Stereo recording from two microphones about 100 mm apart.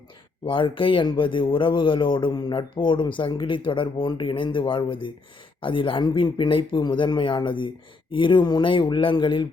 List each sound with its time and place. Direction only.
0.4 s speech: 55° left (ahead or behind)